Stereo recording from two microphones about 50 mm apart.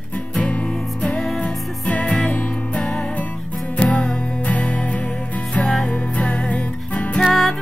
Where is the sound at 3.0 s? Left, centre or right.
Left.